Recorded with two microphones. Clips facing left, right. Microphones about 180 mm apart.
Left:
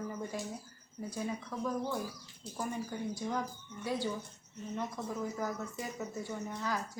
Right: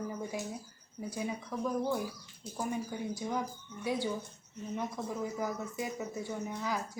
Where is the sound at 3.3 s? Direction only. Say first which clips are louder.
Right 1 dB; 10° right (ahead or behind).